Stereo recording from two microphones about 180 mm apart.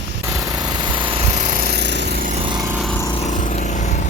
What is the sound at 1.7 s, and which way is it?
Lawn mower, 70° right (ahead or behind).